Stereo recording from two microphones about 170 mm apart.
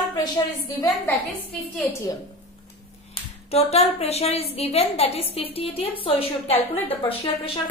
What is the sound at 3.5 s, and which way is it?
A woman's voice, 40° left (ahead or behind).